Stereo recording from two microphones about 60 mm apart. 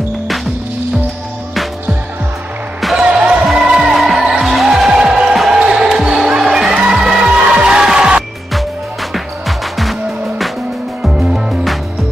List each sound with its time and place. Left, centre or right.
2.8 s music: centre
3.1 s basketball bounce: centre
3.4 s music: centre
11.0 s music: centre